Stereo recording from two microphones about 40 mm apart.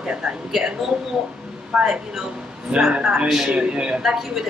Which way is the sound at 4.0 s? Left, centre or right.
Centre.